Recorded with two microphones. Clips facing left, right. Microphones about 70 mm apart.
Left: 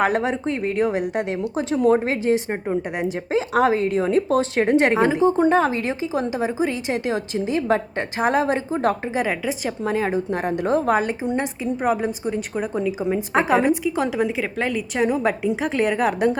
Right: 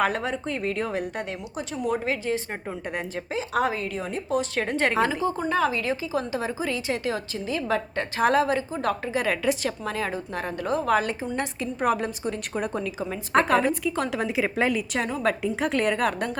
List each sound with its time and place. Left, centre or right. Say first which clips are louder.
0.1 s a woman's voice: left 6 dB; left
0.8 s a woman's voice: left 7 dB; centre
1.4 s speech: left 10 dB; left
2.2 s a woman's voice: left 8 dB; left; by 12.8 s centre
12.8 s a woman's voice: left 8 dB; centre
14.9 s a woman's voice: left 5 dB; centre